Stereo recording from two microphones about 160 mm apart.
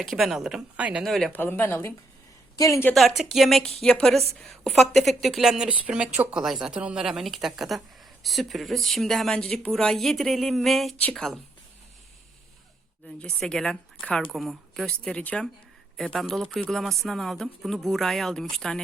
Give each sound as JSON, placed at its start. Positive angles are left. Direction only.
{"t": 0.0, "sound": "a woman's voice", "side_deg": 0}
{"t": 3.2, "sound": "a woman's voice", "side_deg": 0}
{"t": 13.1, "sound": "a woman's voice", "side_deg": 5}